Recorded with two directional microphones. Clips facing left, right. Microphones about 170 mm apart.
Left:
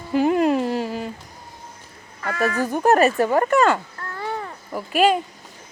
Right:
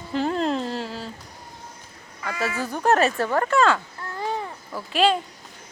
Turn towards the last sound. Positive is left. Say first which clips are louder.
# left 3 dB
turn(degrees=10)  # may be behind; listen again after turning